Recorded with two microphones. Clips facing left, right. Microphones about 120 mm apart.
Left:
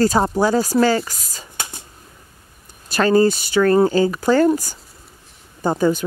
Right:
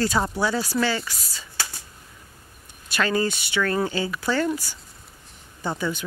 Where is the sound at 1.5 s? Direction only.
20° left (ahead or behind).